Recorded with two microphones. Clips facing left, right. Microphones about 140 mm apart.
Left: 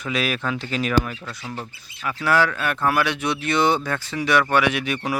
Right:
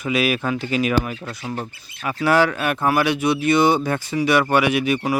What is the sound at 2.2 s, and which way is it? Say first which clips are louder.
Speech: right 3 dB; 20° right (ahead or behind).